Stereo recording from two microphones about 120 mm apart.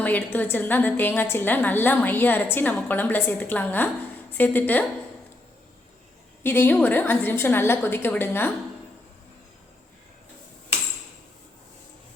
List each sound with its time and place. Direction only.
0.0 s a woman's voice: 15° left (ahead or behind)
6.4 s a woman's voice: 15° left (ahead or behind)